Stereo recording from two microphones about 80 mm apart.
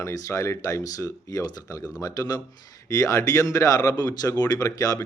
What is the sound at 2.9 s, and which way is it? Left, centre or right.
Speech, left.